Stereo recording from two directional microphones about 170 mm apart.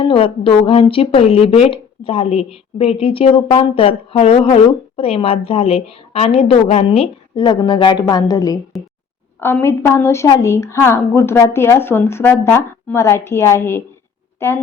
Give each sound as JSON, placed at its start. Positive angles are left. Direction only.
{"t": 0.0, "sound": "speech", "side_deg": 35}
{"t": 8.7, "sound": "speech", "side_deg": 0}
{"t": 9.4, "sound": "a woman's voice", "side_deg": 10}